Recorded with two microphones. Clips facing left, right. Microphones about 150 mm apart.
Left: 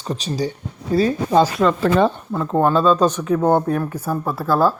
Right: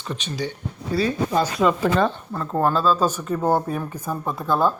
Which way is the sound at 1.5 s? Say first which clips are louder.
Left 2 dB; 5° right (ahead or behind).